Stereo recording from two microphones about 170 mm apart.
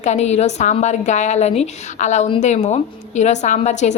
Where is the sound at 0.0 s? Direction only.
40° left (ahead or behind).